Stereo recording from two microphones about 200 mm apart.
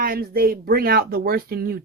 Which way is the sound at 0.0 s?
50° right (ahead or behind).